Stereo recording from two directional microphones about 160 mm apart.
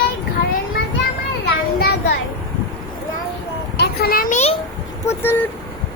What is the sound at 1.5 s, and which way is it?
Speech, 80° left.